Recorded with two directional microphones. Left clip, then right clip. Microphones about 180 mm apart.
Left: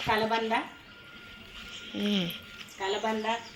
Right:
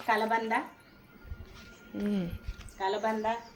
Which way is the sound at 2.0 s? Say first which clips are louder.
Left 4 dB; centre (ahead or behind).